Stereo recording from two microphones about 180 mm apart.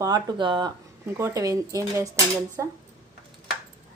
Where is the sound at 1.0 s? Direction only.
15° right (ahead or behind).